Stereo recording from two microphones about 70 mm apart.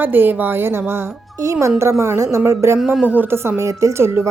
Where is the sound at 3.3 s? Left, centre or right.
Right.